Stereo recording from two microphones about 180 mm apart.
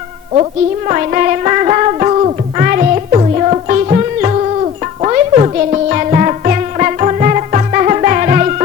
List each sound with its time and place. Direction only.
0.9 s music: 45° right (ahead or behind)